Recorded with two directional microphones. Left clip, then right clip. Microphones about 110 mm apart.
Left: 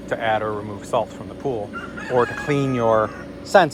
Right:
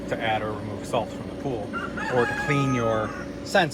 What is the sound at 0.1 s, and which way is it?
Speech, 5° left (ahead or behind).